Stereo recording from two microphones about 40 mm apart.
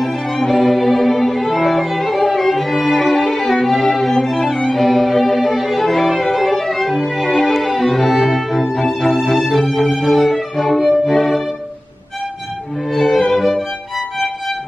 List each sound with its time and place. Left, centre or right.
0.0 s violin: centre
3.6 s music: centre
11.1 s violin: centre
12.9 s music: centre